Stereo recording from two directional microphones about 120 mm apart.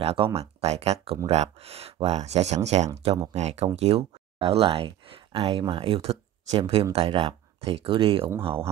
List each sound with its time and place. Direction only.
0.0 s speech: 55° right (ahead or behind)